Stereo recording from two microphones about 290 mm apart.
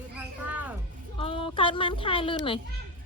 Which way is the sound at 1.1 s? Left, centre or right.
Centre.